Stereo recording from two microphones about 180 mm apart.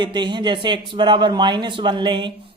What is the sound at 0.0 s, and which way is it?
Speech, 25° right (ahead or behind).